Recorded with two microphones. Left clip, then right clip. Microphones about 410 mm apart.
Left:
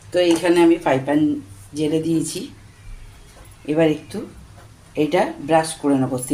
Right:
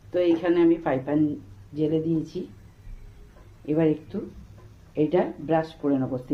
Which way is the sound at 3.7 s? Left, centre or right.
Right.